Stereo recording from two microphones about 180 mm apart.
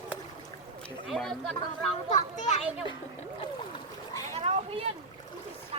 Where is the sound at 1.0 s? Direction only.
Centre (ahead or behind).